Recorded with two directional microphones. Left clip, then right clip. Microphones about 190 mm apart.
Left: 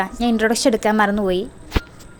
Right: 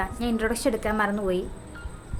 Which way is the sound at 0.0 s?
35° left (ahead or behind).